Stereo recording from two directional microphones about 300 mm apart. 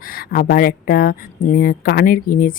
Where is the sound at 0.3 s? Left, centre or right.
Left.